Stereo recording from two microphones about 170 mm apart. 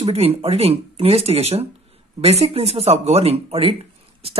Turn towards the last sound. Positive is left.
turn(degrees=-35)  # may be behind; listen again after turning